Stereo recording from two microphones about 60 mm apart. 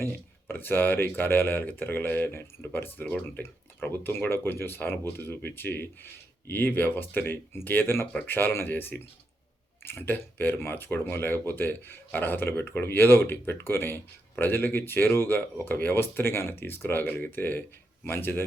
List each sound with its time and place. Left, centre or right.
0.0 s speech: left